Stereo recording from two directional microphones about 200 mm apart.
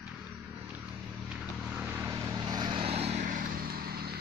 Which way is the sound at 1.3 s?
5° right (ahead or behind).